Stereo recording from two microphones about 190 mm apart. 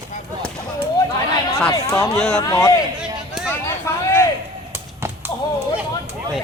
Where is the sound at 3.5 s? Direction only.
15° left (ahead or behind).